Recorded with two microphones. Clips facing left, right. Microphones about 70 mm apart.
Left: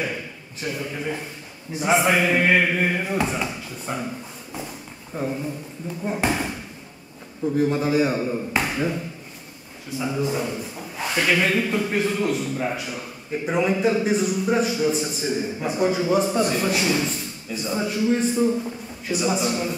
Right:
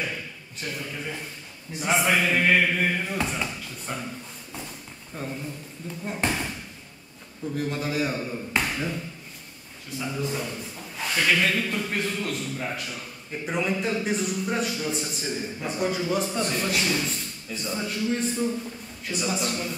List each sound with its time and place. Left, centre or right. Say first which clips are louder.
0.7 s a man's voice: left 6 dB; centre
1.7 s a man's voice: left 4 dB; centre
5.1 s a man's voice: left 7 dB; centre
7.5 s a man's voice: left 8 dB; centre